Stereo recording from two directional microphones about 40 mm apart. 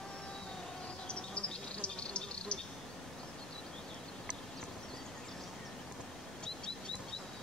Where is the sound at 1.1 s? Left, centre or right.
Left.